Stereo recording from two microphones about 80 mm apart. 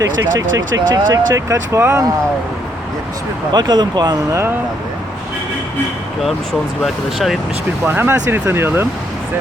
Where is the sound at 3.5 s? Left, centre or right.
Right.